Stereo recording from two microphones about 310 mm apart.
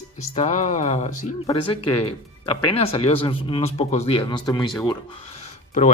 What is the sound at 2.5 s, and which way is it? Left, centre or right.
Speech, centre.